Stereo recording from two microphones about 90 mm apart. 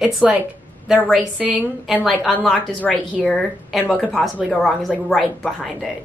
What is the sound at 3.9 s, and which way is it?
Speech, 15° left (ahead or behind).